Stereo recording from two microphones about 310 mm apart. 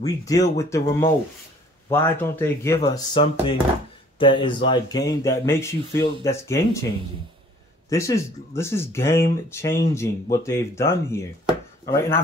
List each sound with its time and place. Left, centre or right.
0.0 s speech: centre
7.9 s speech: centre